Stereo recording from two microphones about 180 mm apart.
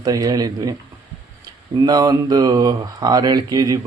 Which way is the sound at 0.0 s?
20° right (ahead or behind).